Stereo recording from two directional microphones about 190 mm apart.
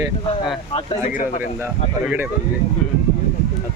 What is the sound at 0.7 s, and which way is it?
Speech, 25° left (ahead or behind).